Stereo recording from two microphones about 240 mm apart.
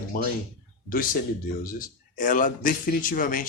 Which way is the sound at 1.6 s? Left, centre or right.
Left.